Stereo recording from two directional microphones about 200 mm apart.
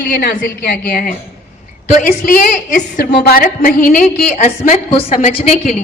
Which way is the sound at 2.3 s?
45° left (ahead or behind).